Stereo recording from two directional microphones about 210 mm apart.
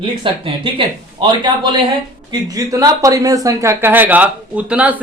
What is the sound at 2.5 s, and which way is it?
Speech, 15° right (ahead or behind).